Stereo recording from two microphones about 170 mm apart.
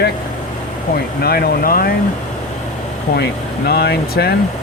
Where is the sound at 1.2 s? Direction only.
65° left (ahead or behind).